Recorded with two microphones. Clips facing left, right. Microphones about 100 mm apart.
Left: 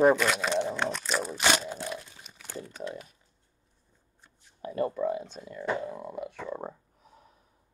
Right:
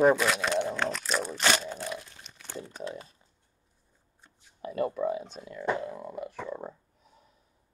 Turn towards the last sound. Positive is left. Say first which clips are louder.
# even
turn(degrees=0)  # may be behind; listen again after turning